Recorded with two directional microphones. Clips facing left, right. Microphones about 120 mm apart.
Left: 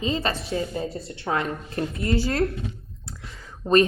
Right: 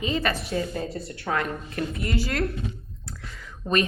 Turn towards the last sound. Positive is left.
turn(degrees=30)  # may be behind; listen again after turning